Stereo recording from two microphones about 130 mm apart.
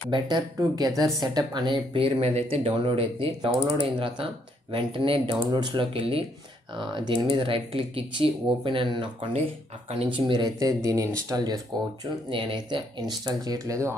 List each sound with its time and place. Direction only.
0.1 s speech: 30° right (ahead or behind)
2.0 s speech: 45° right (ahead or behind); by 13.9 s 25° right (ahead or behind)